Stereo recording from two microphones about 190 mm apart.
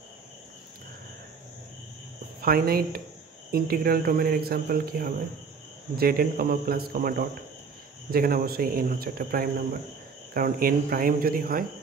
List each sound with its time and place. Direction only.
2.4 s speech: 50° right (ahead or behind)